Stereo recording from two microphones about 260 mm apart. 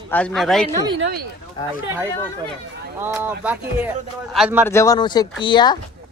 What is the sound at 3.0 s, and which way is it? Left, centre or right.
Speech, centre.